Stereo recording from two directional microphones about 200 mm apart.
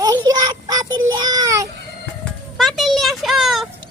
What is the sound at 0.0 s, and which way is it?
Child singing, 20° right (ahead or behind).